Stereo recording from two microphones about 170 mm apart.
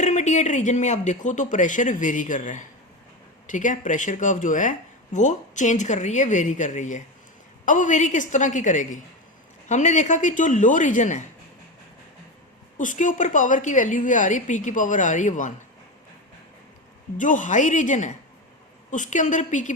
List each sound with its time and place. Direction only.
0.0 s a woman's voice: 45° left (ahead or behind)
12.7 s a woman's voice: 50° left (ahead or behind)
17.2 s a woman's voice: 50° left (ahead or behind)